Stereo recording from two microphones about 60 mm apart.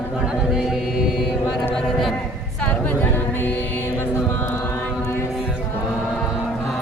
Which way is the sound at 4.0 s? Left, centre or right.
Left.